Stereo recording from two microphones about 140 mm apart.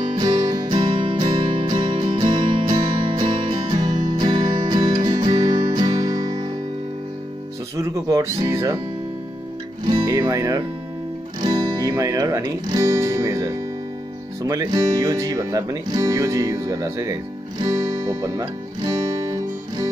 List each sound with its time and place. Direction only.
0.1 s music: 35° right (ahead or behind)
7.7 s music: 20° right (ahead or behind)
9.8 s speech: 25° right (ahead or behind)